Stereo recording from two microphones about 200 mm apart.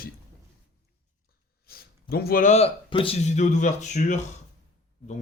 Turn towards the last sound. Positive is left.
turn(degrees=35)  # may be behind; listen again after turning